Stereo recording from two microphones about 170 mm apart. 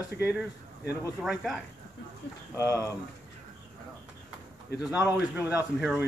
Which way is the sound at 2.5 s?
20° left (ahead or behind).